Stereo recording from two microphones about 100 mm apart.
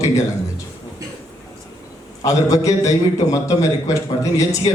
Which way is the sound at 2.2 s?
35° left (ahead or behind).